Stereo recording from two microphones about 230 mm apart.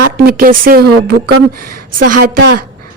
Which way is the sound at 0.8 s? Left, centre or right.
Right.